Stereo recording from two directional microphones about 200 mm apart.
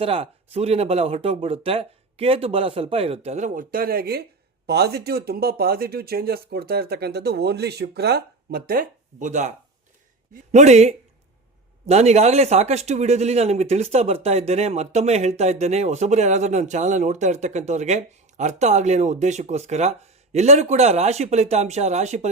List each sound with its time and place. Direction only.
0.0 s speech: 30° right (ahead or behind)
10.5 s speech: 35° right (ahead or behind)